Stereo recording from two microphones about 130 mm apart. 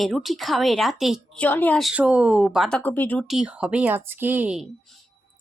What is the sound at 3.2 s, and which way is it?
Speech, 5° right (ahead or behind).